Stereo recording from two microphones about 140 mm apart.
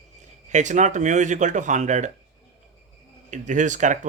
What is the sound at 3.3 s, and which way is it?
Speech, 60° right (ahead or behind).